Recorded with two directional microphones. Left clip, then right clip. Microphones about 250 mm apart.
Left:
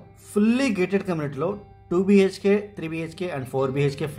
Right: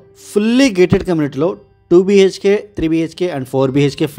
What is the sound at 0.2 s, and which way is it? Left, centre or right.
Speech, right.